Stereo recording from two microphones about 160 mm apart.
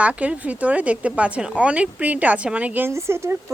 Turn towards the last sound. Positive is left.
turn(degrees=-15)  # may be behind; listen again after turning